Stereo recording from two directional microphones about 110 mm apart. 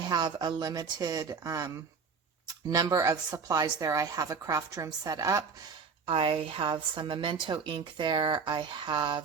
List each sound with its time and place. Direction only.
0.0 s a woman's voice: 40° right (ahead or behind)
6.1 s a woman's voice: 55° right (ahead or behind)